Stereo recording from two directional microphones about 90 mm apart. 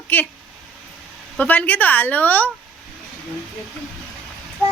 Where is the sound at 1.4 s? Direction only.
20° left (ahead or behind).